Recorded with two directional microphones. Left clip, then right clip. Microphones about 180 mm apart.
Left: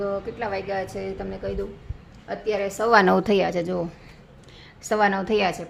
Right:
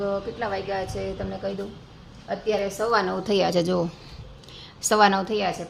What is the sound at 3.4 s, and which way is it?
A woman's voice, 10° right (ahead or behind).